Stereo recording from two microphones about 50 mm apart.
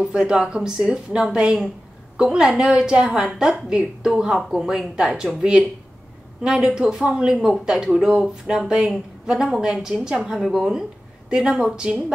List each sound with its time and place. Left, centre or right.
0.0 s a woman's voice: centre